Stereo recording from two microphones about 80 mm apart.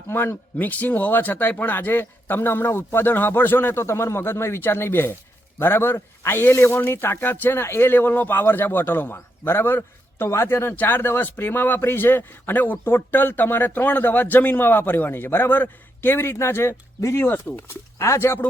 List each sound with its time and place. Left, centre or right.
0.1 s speech: left
0.5 s a man's voice: centre
17.7 s speech: left